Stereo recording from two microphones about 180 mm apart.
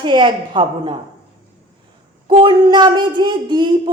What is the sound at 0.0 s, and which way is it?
Speech, 25° right (ahead or behind).